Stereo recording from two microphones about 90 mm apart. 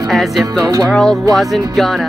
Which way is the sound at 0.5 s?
40° right (ahead or behind).